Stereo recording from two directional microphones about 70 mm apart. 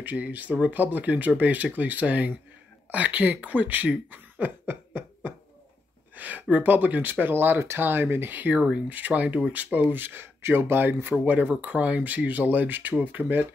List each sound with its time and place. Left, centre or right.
0.0 s speech: right
6.1 s a sound: right
6.5 s speech: right
8.5 s speech: centre
8.8 s speech: right